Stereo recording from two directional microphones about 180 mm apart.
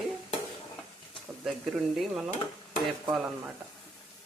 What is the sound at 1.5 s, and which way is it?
Speech, centre (ahead or behind).